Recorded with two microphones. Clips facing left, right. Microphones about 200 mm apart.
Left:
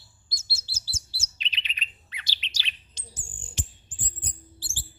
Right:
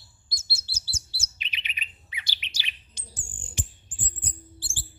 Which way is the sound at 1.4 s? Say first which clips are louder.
Left 1 dB; 10° right (ahead or behind).